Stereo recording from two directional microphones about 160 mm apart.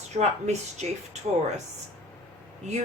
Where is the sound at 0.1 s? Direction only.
45° right (ahead or behind).